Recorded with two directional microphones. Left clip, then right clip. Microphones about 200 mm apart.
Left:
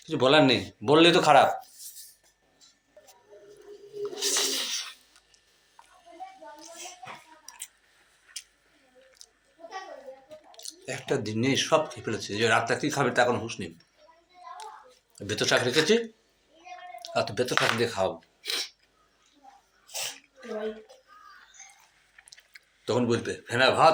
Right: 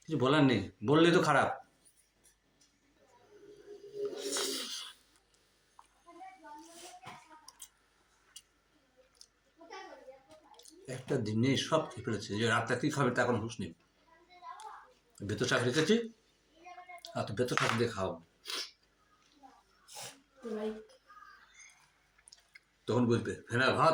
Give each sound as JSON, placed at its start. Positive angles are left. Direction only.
{"t": 0.1, "sound": "speech", "side_deg": -20}
{"t": 4.1, "sound": "a sound", "side_deg": -15}
{"t": 10.6, "sound": "speech", "side_deg": -20}
{"t": 15.1, "sound": "speech", "side_deg": -25}
{"t": 17.0, "sound": "speech", "side_deg": -25}
{"t": 22.5, "sound": "speech", "side_deg": -20}